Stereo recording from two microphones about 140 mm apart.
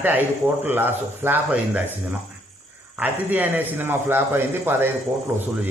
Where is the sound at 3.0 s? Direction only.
15° right (ahead or behind).